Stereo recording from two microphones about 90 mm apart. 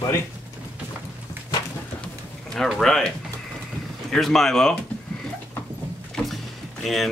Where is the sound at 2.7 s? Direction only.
5° left (ahead or behind).